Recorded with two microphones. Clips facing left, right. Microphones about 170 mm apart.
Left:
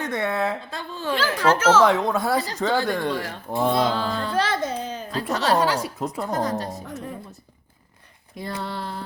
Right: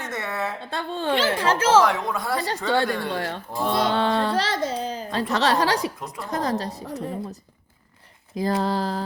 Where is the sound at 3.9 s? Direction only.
70° right (ahead or behind).